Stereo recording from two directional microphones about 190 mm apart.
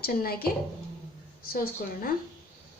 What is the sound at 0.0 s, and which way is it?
Speech, 50° left (ahead or behind).